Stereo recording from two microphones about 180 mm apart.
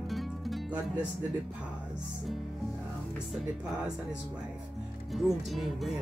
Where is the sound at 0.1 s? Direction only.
Centre (ahead or behind).